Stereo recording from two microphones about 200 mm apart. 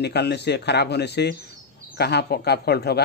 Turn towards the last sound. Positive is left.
turn(degrees=55)  # may be behind; listen again after turning